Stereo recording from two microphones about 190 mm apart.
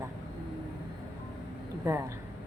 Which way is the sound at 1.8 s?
15° right (ahead or behind).